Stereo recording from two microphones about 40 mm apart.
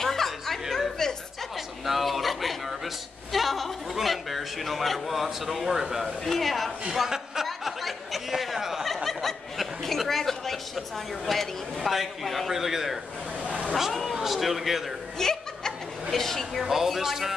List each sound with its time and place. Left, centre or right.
0.0 s chuckle: centre
1.9 s a sound: centre
6.2 s a man's voice: centre
7.4 s a sound: centre
8.8 s snicker: centre
11.2 s a man's voice: centre
15.1 s snicker: centre
16.6 s speech: centre